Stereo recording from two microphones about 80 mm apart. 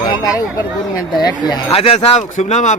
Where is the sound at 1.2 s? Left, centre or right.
Left.